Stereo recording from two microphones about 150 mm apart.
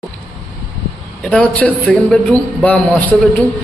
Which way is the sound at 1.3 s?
10° left (ahead or behind).